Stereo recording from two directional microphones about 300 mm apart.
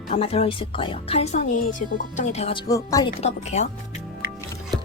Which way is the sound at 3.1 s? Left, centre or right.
Left.